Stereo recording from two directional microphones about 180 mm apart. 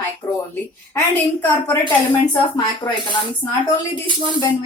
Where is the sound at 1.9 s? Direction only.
25° left (ahead or behind).